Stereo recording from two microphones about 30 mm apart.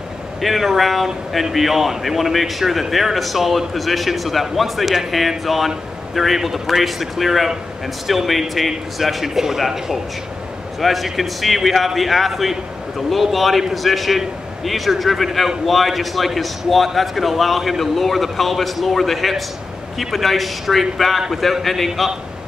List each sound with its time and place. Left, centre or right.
0.4 s a man's voice: centre
10.8 s speech: centre